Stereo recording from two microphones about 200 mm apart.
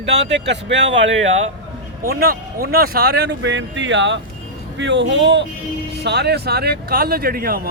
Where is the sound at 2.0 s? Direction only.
50° right (ahead or behind).